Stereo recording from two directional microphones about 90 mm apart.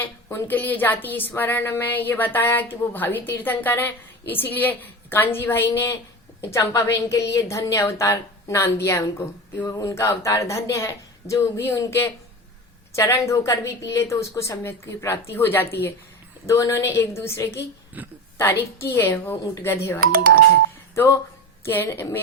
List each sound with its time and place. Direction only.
0.0 s a woman's voice: 25° left (ahead or behind)
18.0 s a woman's voice: 20° right (ahead or behind)
18.3 s a woman's voice: 30° left (ahead or behind)